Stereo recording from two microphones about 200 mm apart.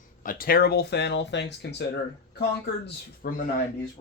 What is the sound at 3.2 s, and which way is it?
Speech, 50° left (ahead or behind).